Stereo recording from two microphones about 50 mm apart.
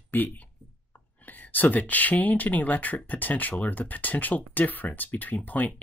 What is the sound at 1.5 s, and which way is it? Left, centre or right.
Speech, left.